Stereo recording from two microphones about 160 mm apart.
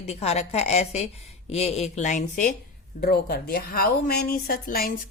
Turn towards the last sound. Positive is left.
turn(degrees=65)  # may be behind; listen again after turning